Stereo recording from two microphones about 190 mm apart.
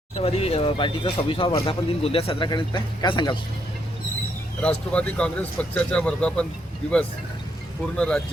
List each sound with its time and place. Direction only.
0.2 s speech: 30° left (ahead or behind)
4.6 s speech: 5° left (ahead or behind)
7.9 s speech: 5° left (ahead or behind)